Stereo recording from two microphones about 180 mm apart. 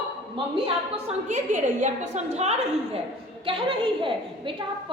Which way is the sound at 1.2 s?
40° right (ahead or behind).